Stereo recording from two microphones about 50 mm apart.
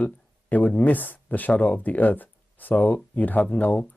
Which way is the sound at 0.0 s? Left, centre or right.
Left.